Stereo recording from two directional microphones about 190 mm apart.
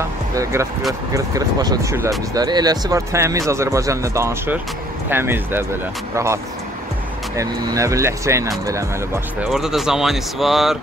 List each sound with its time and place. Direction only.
0.0 s music: 15° right (ahead or behind)
1.1 s speech: 20° right (ahead or behind)
9.5 s speech: centre (ahead or behind)